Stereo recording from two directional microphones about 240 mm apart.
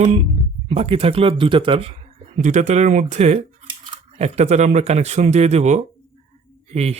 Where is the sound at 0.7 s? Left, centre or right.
Right.